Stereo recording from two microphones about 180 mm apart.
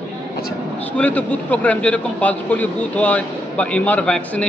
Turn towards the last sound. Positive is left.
turn(degrees=5)  # may be behind; listen again after turning